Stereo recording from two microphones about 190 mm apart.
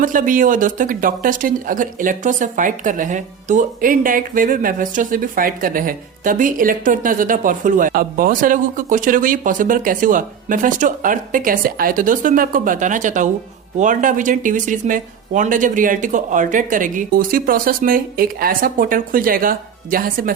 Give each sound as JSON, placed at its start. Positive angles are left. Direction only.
{"t": 0.0, "sound": "speech", "side_deg": -45}